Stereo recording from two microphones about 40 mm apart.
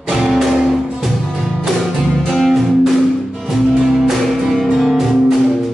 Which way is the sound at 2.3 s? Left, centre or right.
Centre.